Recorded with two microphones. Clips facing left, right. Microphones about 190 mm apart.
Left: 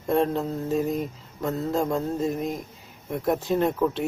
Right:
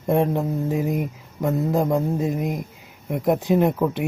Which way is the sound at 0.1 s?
15° right (ahead or behind).